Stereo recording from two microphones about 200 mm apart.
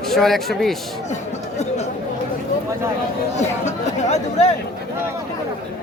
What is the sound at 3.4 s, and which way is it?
Speech, 35° left (ahead or behind).